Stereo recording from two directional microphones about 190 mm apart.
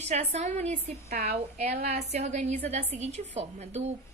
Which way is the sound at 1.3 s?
35° right (ahead or behind).